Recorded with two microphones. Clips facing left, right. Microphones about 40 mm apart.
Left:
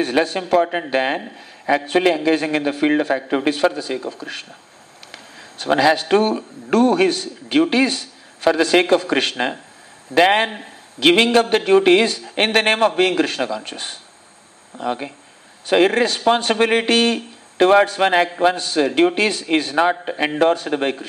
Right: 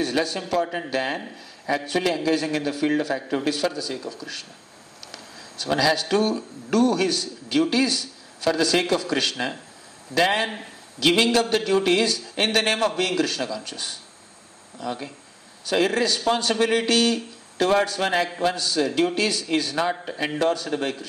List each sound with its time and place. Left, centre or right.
0.0 s a man's voice: left